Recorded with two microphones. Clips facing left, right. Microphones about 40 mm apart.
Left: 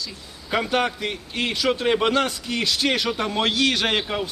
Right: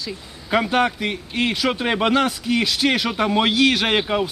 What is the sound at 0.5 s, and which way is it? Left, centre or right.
A man's voice, centre.